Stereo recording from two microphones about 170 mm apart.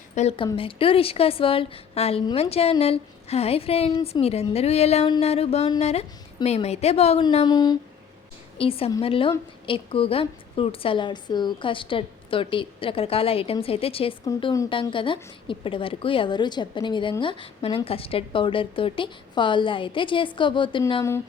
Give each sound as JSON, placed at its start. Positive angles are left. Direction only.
{"t": 0.2, "sound": "a woman's voice", "side_deg": 40}
{"t": 8.5, "sound": "a woman's voice", "side_deg": 35}
{"t": 14.3, "sound": "a woman's voice", "side_deg": 20}
{"t": 14.7, "sound": "a woman's voice", "side_deg": 30}